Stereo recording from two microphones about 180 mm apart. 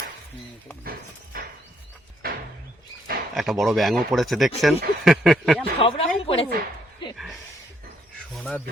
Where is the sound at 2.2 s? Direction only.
55° right (ahead or behind).